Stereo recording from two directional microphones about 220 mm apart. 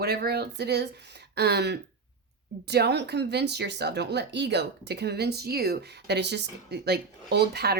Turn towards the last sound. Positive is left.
turn(degrees=-45)  # may be behind; listen again after turning